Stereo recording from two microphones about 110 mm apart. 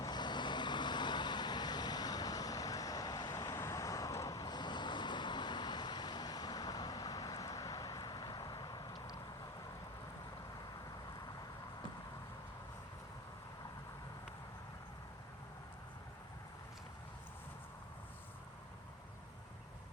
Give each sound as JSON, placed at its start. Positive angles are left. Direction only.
{"t": 0.0, "sound": "vehicle", "side_deg": 40}